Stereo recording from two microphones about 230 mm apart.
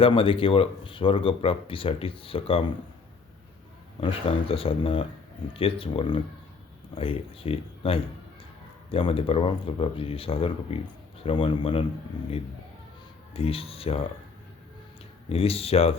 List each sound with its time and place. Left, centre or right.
0.0 s speech: left
4.0 s speech: left
13.3 s speech: left
15.3 s speech: left